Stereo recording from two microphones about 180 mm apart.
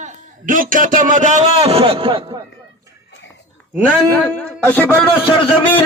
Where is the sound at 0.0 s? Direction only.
45° right (ahead or behind); by 2.2 s 30° right (ahead or behind).